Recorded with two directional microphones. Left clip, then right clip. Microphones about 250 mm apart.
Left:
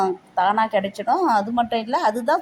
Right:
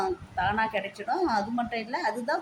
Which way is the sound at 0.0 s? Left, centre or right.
Centre.